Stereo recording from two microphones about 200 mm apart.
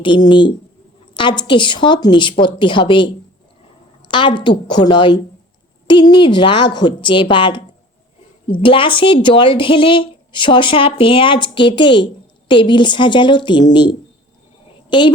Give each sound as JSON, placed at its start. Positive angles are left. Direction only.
{"t": 0.0, "sound": "a woman's voice", "side_deg": 25}
{"t": 4.1, "sound": "a woman's voice", "side_deg": 25}
{"t": 8.6, "sound": "a woman's voice", "side_deg": 25}
{"t": 14.8, "sound": "a woman's voice", "side_deg": 25}